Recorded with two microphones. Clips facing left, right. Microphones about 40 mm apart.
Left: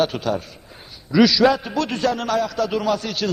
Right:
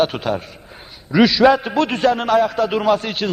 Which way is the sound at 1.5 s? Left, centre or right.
Right.